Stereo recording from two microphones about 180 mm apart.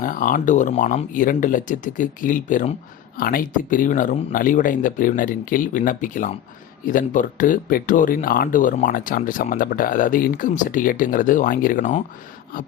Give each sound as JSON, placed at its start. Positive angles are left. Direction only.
{"t": 0.0, "sound": "speech", "side_deg": 50}